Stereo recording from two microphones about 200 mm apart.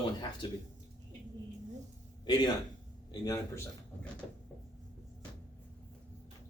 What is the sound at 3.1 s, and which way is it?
Speech, 20° left (ahead or behind).